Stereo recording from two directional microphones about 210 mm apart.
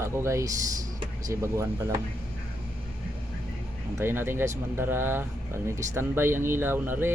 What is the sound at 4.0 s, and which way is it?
Speech, 10° right (ahead or behind).